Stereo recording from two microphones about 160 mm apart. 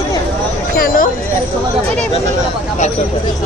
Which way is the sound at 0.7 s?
60° left (ahead or behind).